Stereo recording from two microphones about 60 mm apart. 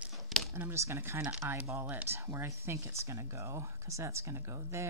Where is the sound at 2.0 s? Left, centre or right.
Right.